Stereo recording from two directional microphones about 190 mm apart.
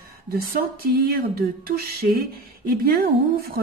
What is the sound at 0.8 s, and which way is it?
Speech, 50° right (ahead or behind).